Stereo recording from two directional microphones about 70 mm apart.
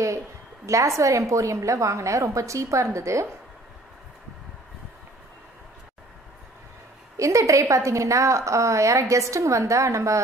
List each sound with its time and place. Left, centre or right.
0.7 s a woman's voice: right
7.2 s a woman's voice: right